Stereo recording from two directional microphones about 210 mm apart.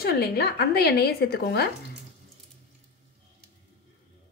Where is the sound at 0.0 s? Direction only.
50° left (ahead or behind).